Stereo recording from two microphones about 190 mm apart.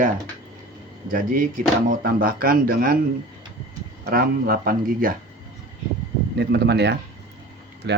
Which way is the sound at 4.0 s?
50° right (ahead or behind).